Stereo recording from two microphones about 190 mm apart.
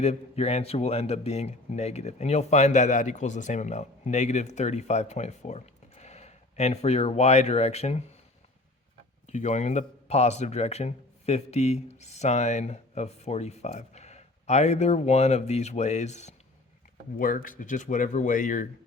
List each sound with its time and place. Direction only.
0.0 s speech: 35° left (ahead or behind)
9.2 s speech: 40° left (ahead or behind)